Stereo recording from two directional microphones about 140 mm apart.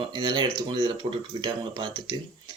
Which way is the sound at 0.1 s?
30° right (ahead or behind).